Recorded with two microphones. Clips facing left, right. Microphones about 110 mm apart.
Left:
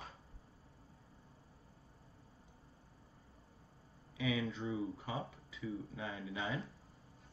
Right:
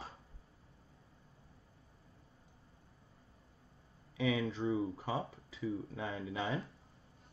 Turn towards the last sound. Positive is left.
turn(degrees=-35)  # may be behind; listen again after turning